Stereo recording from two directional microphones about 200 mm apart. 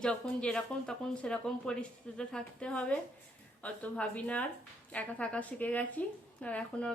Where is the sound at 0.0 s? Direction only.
5° left (ahead or behind).